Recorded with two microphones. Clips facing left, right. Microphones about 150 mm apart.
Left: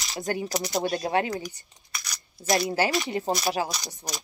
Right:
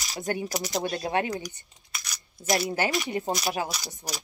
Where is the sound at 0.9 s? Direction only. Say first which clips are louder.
Left 2 dB; 20° left (ahead or behind).